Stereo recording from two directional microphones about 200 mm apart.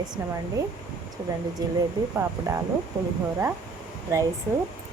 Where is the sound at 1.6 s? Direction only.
20° right (ahead or behind).